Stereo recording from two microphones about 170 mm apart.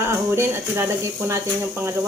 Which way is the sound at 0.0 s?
15° right (ahead or behind).